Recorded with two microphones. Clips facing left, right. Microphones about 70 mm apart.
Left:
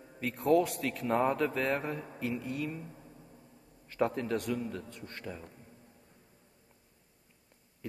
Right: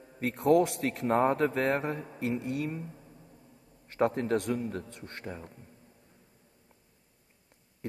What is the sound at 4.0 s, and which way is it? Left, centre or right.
A man's voice, right.